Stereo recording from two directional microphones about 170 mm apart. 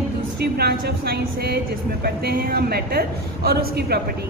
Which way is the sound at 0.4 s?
70° right (ahead or behind).